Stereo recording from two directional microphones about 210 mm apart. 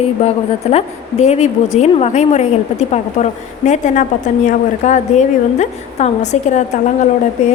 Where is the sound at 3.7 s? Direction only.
35° left (ahead or behind).